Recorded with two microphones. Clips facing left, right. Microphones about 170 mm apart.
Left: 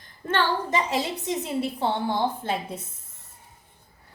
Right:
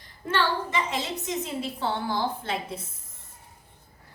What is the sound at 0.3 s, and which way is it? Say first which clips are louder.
A woman's voice: left 2 dB; 35° left (ahead or behind).